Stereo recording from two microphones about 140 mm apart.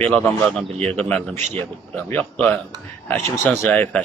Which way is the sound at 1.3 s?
55° right (ahead or behind).